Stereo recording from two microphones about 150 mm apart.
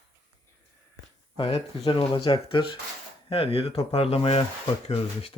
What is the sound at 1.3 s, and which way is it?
Speech, 35° left (ahead or behind).